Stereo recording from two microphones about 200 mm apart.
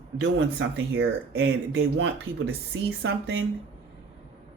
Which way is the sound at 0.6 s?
70° right (ahead or behind).